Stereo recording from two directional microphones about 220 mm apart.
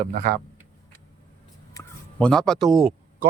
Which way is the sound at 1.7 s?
15° left (ahead or behind).